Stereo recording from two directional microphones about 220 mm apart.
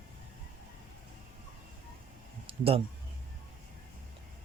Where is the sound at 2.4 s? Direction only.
25° right (ahead or behind).